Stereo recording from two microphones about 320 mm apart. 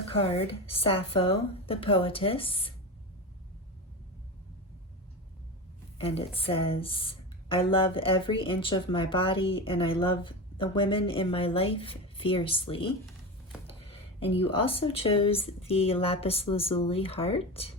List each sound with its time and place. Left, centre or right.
0.1 s speech: centre
6.0 s speech: centre
13.8 s speech: centre